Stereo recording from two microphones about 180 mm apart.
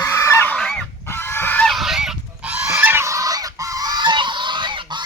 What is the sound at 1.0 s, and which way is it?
Goose, 15° left (ahead or behind).